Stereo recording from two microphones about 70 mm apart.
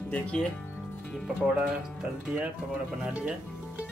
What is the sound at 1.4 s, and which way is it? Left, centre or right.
Speech, centre.